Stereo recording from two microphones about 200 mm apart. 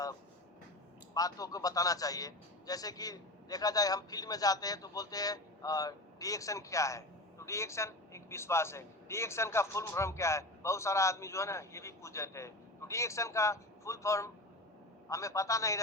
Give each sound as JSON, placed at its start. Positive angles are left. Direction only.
{"t": 1.1, "sound": "a man's voice", "side_deg": 20}